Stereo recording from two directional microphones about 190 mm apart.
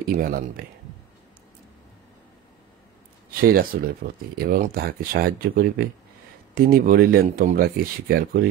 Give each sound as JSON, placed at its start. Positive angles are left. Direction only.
{"t": 0.2, "sound": "speech", "side_deg": -50}
{"t": 3.4, "sound": "speech", "side_deg": -50}